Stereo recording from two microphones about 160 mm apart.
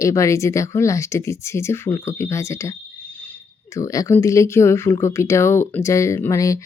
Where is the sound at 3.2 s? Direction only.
15° left (ahead or behind).